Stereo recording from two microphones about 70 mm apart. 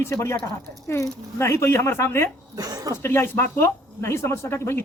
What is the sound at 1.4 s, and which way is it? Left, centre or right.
Speech, left.